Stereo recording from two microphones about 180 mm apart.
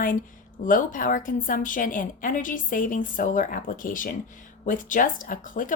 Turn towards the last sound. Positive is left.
turn(degrees=50)  # may be behind; listen again after turning